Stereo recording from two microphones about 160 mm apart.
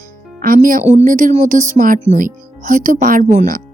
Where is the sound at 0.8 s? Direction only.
45° right (ahead or behind).